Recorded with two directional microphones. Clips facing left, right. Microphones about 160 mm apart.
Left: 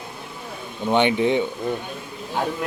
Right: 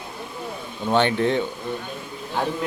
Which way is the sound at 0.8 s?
15° left (ahead or behind).